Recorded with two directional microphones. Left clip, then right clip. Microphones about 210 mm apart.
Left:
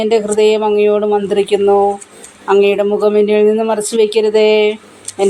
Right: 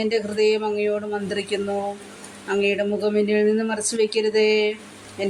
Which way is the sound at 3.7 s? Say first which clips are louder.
Left 10 dB; 55° left (ahead or behind).